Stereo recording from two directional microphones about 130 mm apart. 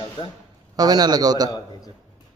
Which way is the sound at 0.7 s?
30° right (ahead or behind).